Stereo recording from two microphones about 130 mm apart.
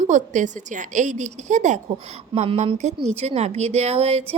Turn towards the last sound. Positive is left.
turn(degrees=-50)  # may be behind; listen again after turning